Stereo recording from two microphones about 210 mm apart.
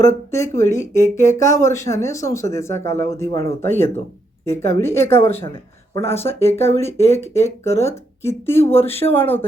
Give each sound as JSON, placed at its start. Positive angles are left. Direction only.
{"t": 0.0, "sound": "speech", "side_deg": 15}
{"t": 6.4, "sound": "speech", "side_deg": 30}
{"t": 6.7, "sound": "speech", "side_deg": 10}
{"t": 8.9, "sound": "speech", "side_deg": 30}
{"t": 9.1, "sound": "speech", "side_deg": 10}